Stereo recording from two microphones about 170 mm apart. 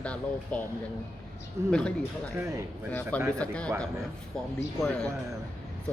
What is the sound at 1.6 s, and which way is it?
Speech, 5° left (ahead or behind).